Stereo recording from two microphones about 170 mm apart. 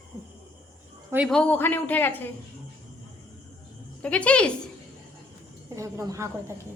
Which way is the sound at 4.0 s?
10° left (ahead or behind).